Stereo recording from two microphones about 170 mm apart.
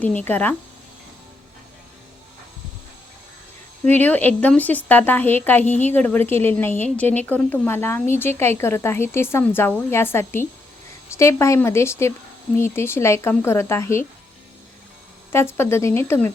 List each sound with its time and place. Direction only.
0.0 s a woman's voice: 10° left (ahead or behind)
3.9 s a woman's voice: 10° left (ahead or behind)
15.3 s a woman's voice: 15° left (ahead or behind)